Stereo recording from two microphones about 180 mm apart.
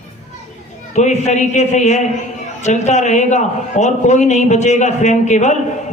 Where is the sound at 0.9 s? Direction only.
40° left (ahead or behind).